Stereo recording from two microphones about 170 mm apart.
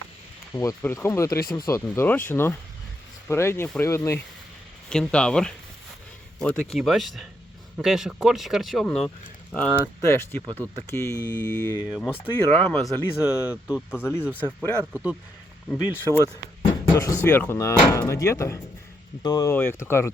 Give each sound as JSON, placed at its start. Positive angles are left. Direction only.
{"t": 0.5, "sound": "speech", "side_deg": 20}
{"t": 4.9, "sound": "speech", "side_deg": 5}
{"t": 12.8, "sound": "speech", "side_deg": -5}
{"t": 13.9, "sound": "speech", "side_deg": 15}